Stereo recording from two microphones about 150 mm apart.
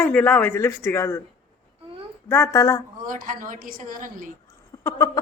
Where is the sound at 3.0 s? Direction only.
65° right (ahead or behind).